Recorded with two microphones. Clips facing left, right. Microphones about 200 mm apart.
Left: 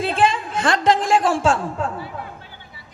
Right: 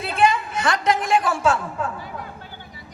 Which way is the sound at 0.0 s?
30° left (ahead or behind).